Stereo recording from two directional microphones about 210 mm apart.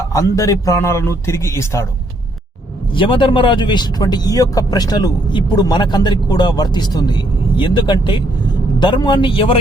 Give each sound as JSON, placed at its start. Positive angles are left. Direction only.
{"t": 0.1, "sound": "a man's voice", "side_deg": 15}
{"t": 2.9, "sound": "speech", "side_deg": 25}